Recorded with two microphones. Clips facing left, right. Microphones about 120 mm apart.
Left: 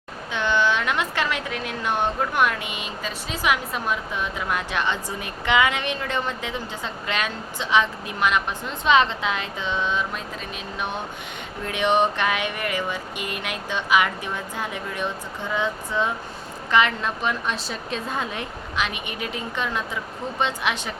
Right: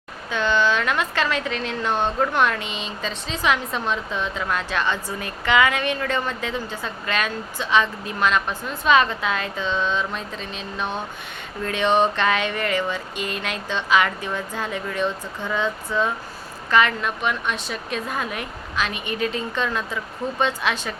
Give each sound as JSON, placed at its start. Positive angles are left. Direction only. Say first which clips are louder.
{"t": 0.3, "sound": "a woman's voice", "louder": "right 1 dB", "side_deg": 15}
{"t": 17.0, "sound": "a woman's voice", "louder": "right 1 dB", "side_deg": 30}